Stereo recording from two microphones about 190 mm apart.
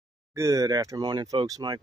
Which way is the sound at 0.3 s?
15° right (ahead or behind).